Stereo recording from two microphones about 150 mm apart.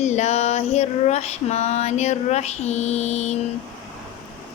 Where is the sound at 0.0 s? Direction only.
50° left (ahead or behind).